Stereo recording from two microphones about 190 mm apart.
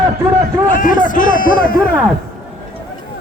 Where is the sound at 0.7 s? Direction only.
45° left (ahead or behind).